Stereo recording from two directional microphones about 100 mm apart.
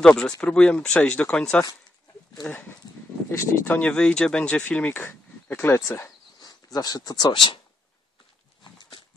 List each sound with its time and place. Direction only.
0.0 s speech: 5° left (ahead or behind)
3.3 s speech: 15° left (ahead or behind)
6.4 s speech: 40° left (ahead or behind)
7.3 s speech: 55° left (ahead or behind)